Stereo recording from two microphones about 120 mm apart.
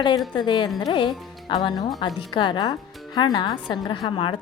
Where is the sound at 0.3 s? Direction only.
40° left (ahead or behind).